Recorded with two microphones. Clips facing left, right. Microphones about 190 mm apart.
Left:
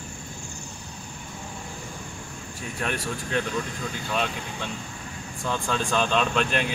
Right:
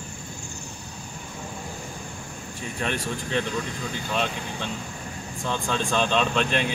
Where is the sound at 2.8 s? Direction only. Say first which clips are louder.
Right 1 dB; 5° left (ahead or behind).